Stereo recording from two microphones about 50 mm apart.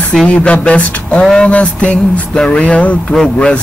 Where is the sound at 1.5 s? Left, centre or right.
Left.